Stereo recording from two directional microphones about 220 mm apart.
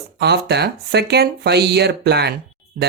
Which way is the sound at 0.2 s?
50° right (ahead or behind).